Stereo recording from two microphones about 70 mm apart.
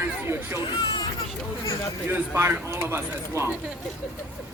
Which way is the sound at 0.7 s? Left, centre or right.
Left.